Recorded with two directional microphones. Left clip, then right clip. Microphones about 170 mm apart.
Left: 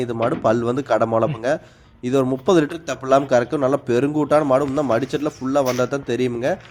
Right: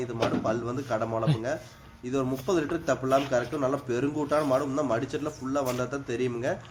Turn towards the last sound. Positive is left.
turn(degrees=40)  # may be behind; listen again after turning